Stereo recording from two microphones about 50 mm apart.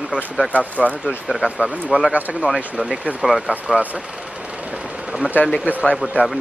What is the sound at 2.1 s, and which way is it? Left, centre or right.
Speech, right.